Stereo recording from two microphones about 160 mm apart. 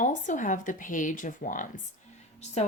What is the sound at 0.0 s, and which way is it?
Speech, 50° left (ahead or behind).